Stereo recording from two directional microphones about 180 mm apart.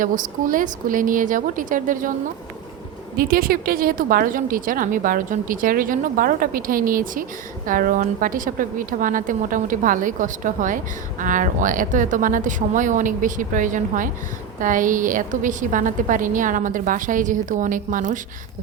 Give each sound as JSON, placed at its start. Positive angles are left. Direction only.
{"t": 0.0, "sound": "a woman's voice", "side_deg": -50}
{"t": 3.2, "sound": "a woman's voice", "side_deg": -55}